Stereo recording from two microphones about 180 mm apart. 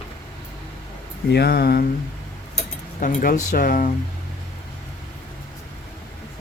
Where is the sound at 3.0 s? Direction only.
50° left (ahead or behind).